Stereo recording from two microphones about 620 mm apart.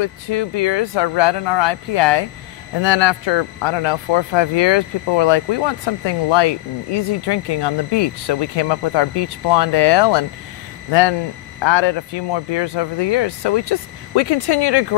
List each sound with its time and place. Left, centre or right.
0.0 s speech: left